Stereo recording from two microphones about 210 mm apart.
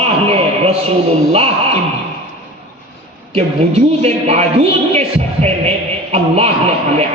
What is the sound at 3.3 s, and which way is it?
A woman's voice, 30° right (ahead or behind).